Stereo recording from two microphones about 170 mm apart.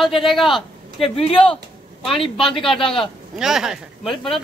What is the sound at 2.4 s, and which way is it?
A man's voice, centre (ahead or behind).